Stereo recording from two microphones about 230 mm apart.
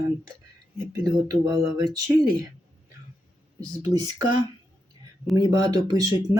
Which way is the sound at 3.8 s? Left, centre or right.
Centre.